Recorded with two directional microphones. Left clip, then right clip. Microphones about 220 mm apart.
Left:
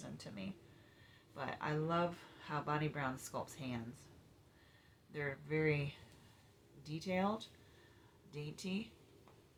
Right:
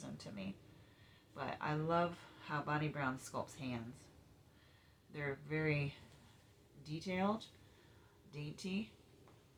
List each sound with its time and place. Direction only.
0.0 s a sound: 20° left (ahead or behind)
1.3 s speech: 20° left (ahead or behind)
5.1 s speech: 20° left (ahead or behind)
6.8 s speech: 20° left (ahead or behind)